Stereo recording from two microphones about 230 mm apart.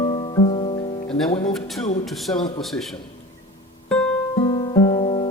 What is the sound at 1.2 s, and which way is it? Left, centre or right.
Speech, left.